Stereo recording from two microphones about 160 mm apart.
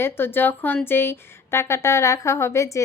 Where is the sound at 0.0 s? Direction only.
15° left (ahead or behind).